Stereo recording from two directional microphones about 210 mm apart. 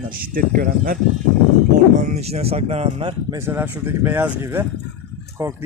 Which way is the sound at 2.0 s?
30° right (ahead or behind).